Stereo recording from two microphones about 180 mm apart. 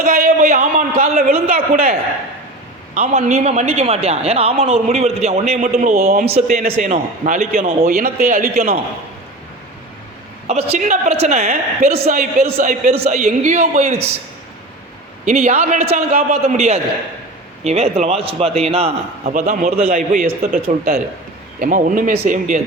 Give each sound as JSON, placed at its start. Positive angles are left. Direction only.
{"t": 0.0, "sound": "a man's voice", "side_deg": -50}
{"t": 2.9, "sound": "a man's voice", "side_deg": -35}
{"t": 10.4, "sound": "a man's voice", "side_deg": -35}
{"t": 15.2, "sound": "a man's voice", "side_deg": -40}
{"t": 21.6, "sound": "a man's voice", "side_deg": -50}